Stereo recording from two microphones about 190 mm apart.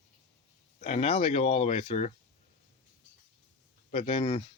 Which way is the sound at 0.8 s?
35° left (ahead or behind).